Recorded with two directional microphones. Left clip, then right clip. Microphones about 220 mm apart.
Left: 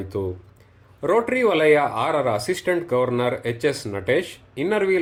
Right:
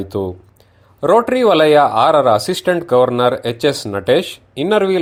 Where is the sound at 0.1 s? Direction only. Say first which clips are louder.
Right 5 dB; 40° right (ahead or behind).